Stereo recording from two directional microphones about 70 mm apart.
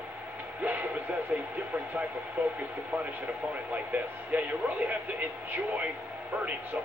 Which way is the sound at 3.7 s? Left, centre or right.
Right.